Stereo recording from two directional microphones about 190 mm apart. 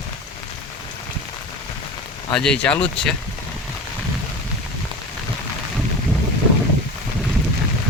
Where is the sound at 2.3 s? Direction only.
5° left (ahead or behind).